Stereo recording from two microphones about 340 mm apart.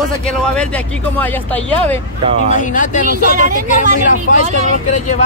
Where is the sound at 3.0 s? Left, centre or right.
Right.